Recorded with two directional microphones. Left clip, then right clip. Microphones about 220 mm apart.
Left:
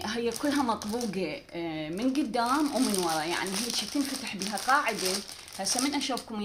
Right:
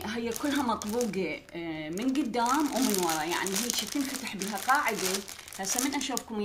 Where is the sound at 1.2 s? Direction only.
40° left (ahead or behind).